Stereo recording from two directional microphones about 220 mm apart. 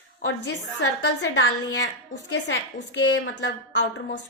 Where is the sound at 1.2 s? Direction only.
50° left (ahead or behind).